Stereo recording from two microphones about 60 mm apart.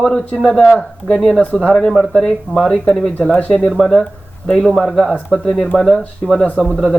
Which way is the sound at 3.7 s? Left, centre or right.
Centre.